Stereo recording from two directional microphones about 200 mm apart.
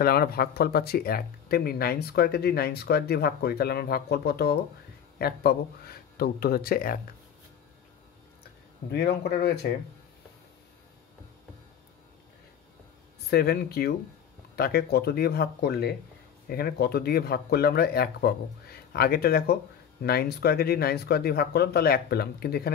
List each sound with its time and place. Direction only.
0.0 s speech: 50° left (ahead or behind)
8.9 s speech: 55° left (ahead or behind)
13.3 s speech: 55° left (ahead or behind)